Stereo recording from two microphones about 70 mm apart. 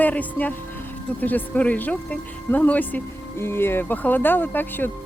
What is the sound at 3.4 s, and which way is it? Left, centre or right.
Speech, left.